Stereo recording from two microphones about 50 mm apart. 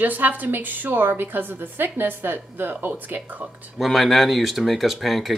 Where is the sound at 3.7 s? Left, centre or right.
Centre.